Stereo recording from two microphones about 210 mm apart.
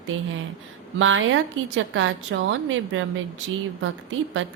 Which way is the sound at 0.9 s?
70° right (ahead or behind).